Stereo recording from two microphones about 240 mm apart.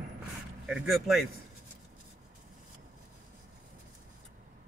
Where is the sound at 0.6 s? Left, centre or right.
Centre.